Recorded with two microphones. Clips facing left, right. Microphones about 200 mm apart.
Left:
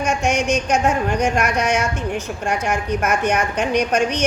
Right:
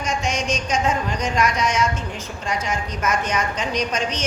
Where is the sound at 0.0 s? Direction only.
65° left (ahead or behind).